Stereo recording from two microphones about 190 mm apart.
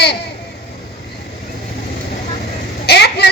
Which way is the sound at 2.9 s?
60° left (ahead or behind).